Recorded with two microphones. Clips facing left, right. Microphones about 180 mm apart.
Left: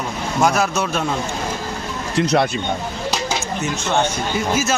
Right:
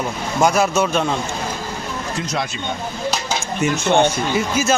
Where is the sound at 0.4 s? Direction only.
Centre (ahead or behind).